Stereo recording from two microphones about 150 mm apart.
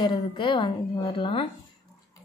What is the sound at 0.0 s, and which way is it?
A woman's voice, 30° left (ahead or behind).